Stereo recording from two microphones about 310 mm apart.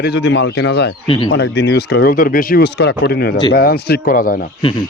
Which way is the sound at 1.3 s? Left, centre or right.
Left.